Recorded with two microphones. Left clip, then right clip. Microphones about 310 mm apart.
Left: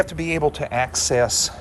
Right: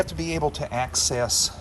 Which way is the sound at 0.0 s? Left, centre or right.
Centre.